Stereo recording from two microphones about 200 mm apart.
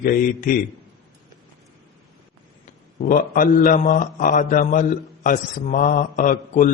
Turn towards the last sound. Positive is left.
turn(degrees=40)  # may be behind; listen again after turning